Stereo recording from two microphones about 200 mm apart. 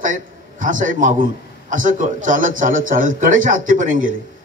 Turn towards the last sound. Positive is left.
turn(degrees=-40)  # may be behind; listen again after turning